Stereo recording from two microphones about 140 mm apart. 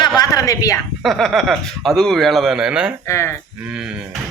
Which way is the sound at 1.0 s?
Centre (ahead or behind).